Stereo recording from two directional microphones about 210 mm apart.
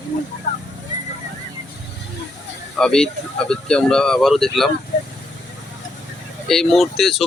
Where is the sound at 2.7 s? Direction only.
5° left (ahead or behind).